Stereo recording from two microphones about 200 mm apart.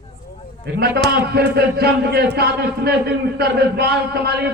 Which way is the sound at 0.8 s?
50° right (ahead or behind).